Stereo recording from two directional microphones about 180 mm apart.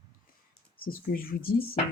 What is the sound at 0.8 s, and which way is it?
Speech, 55° left (ahead or behind).